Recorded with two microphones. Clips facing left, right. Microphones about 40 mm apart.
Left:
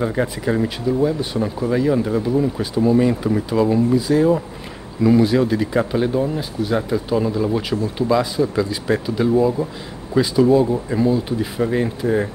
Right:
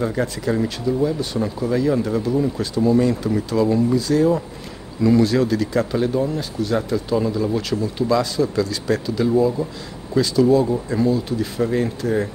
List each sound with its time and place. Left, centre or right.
0.0 s speech: centre